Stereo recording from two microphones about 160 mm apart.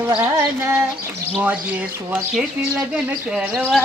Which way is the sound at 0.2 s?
15° right (ahead or behind).